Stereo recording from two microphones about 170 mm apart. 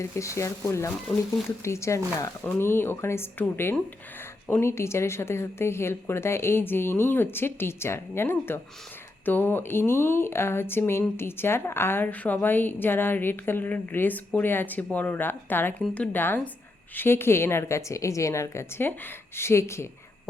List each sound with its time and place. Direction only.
0.0 s speech: 15° left (ahead or behind)